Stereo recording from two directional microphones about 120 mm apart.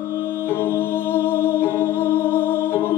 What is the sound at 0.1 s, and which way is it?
Music, 20° left (ahead or behind).